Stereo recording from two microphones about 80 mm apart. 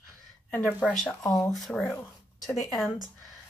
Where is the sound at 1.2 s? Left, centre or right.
Left.